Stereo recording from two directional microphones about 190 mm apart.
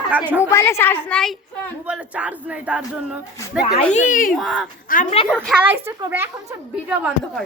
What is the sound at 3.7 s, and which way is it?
Speech, 40° left (ahead or behind).